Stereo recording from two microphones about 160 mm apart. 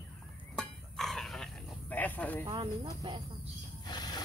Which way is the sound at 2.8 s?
25° right (ahead or behind).